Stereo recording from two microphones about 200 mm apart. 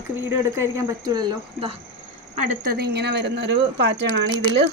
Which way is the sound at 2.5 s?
45° right (ahead or behind).